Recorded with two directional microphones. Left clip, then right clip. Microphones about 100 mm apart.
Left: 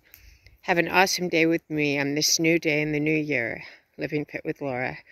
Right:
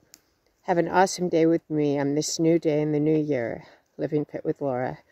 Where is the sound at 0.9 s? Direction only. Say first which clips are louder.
Right 1 dB; 55° right (ahead or behind).